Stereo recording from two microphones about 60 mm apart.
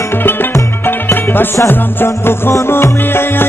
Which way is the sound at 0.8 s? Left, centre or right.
Left.